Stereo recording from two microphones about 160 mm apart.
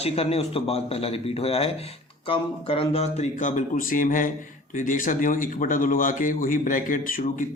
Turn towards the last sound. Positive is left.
turn(degrees=60)  # may be behind; listen again after turning